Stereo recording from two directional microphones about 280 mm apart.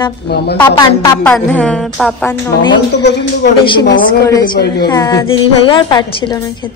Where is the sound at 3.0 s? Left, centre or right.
Left.